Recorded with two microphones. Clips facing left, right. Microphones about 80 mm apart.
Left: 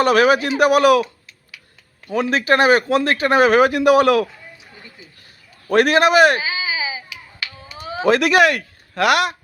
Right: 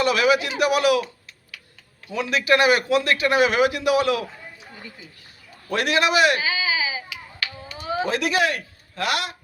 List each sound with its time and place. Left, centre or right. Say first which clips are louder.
0.0 s speech: left 5 dB; left
2.0 s speech: left 4 dB; left
5.6 s speech: left 7 dB; left
6.4 s a sound: even; left
8.0 s speech: left 9 dB; left